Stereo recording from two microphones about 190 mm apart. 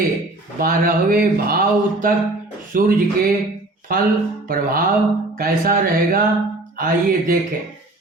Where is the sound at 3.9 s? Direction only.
50° right (ahead or behind).